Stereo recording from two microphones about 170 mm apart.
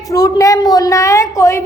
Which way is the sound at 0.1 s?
20° left (ahead or behind).